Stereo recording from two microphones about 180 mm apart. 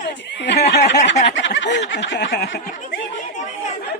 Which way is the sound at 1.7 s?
85° left.